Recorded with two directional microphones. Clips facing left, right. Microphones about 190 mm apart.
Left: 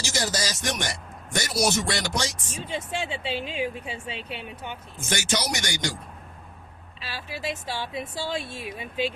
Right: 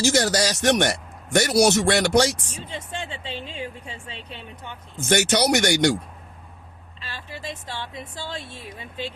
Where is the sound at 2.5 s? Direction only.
10° left (ahead or behind).